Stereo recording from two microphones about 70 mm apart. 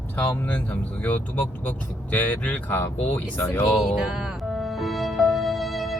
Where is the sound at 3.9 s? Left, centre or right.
Centre.